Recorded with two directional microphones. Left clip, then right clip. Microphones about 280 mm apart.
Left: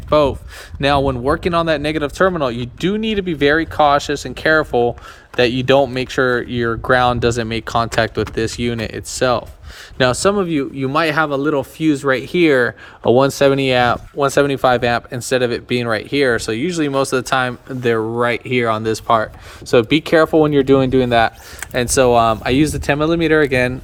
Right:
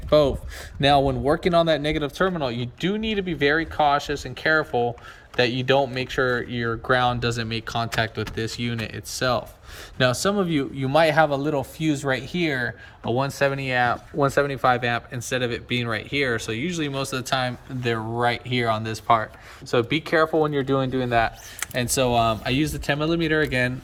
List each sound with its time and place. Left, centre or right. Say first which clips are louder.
0.1 s speech: left 4 dB; centre
13.1 s speech: left 9 dB; left
21.7 s speech: left 9 dB; centre